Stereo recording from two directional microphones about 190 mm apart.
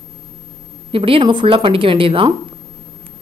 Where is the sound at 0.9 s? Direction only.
30° right (ahead or behind).